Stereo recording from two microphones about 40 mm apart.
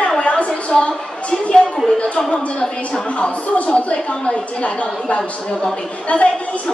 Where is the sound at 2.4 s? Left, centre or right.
Left.